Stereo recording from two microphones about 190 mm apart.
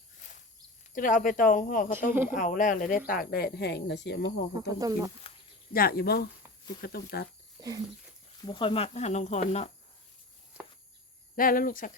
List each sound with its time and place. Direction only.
0.9 s speech: 45° left (ahead or behind); by 4.7 s 65° left (ahead or behind)
4.8 s speech: 20° right (ahead or behind)
5.7 s speech: 50° left (ahead or behind)
7.6 s a sound: 20° right (ahead or behind)
8.4 s speech: 25° left (ahead or behind)
11.3 s speech: 45° left (ahead or behind)